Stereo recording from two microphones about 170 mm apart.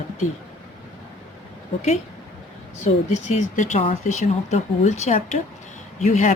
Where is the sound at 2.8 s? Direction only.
45° left (ahead or behind).